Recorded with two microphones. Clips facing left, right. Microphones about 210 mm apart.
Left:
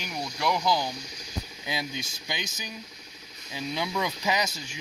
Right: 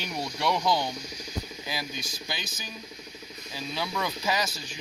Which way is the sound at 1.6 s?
20° left (ahead or behind).